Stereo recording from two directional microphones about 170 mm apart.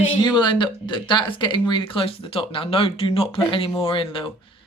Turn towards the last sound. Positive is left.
turn(degrees=30)  # may be behind; listen again after turning